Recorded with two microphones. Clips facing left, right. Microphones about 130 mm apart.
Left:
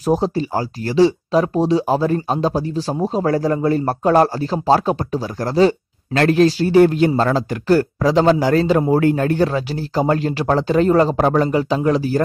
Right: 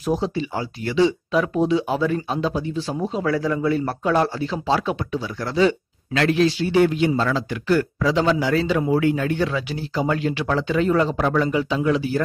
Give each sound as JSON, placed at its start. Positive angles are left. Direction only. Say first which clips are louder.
{"t": 0.0, "sound": "speech", "louder": "left 5 dB", "side_deg": 40}